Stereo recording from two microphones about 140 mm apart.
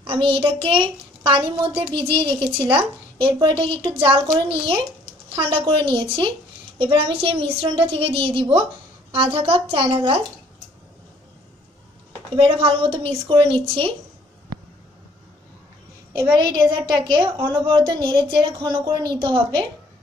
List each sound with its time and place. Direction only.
0.0 s a child's voice: 40° right (ahead or behind)
12.4 s a woman's voice: 40° right (ahead or behind)
16.3 s a woman's voice: 30° right (ahead or behind)